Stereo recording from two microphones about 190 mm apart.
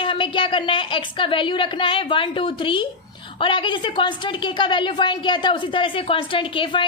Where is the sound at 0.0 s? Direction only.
25° left (ahead or behind).